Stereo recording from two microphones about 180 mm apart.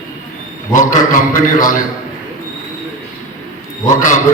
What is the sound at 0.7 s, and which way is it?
A man's voice, 45° left (ahead or behind).